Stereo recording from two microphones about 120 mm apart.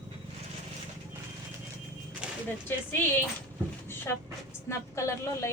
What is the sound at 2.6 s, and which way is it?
Speech, 20° left (ahead or behind).